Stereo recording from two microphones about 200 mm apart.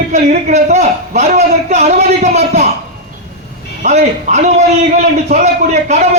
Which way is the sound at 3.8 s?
35° right (ahead or behind).